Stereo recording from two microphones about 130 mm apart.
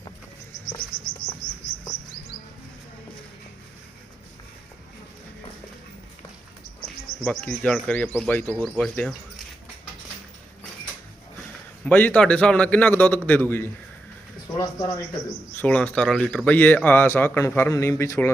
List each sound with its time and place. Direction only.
7.2 s speech: 10° left (ahead or behind)
8.6 s speech: 5° left (ahead or behind)
11.9 s speech: 10° left (ahead or behind)
14.4 s speech: 30° left (ahead or behind)
15.6 s speech: 10° left (ahead or behind)